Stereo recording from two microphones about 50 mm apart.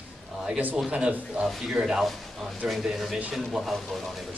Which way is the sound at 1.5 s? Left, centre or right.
Centre.